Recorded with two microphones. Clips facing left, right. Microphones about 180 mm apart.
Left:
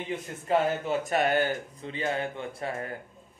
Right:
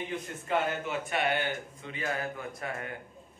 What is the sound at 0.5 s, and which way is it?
Speech, 40° left (ahead or behind).